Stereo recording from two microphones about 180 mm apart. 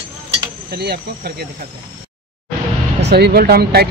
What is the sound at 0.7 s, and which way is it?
Speech, 60° right (ahead or behind).